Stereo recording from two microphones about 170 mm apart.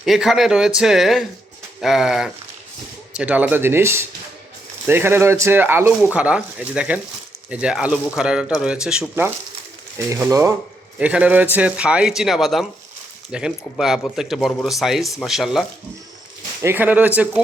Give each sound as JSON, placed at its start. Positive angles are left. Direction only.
{"t": 0.0, "sound": "speech", "side_deg": 0}
{"t": 16.6, "sound": "speech", "side_deg": -15}